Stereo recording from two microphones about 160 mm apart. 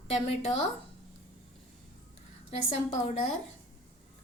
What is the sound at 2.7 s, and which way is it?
Speech, 40° left (ahead or behind).